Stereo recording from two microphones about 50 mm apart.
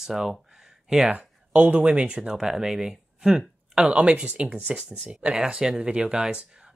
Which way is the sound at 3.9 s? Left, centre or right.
Right.